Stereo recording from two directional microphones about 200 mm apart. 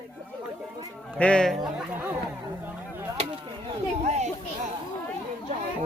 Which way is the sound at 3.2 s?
30° right (ahead or behind).